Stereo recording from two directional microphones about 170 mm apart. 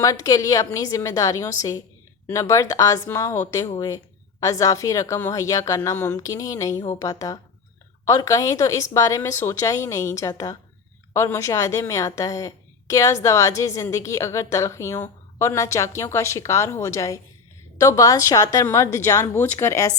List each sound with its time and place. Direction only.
0.0 s a woman's voice: 20° left (ahead or behind)